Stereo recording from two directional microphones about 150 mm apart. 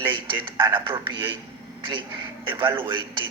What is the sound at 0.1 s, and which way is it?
A man's voice, 30° right (ahead or behind).